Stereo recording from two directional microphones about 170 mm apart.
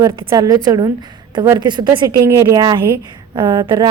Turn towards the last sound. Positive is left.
turn(degrees=-30)  # may be behind; listen again after turning